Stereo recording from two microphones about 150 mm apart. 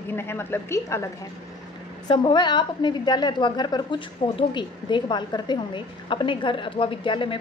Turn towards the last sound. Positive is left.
turn(degrees=35)  # may be behind; listen again after turning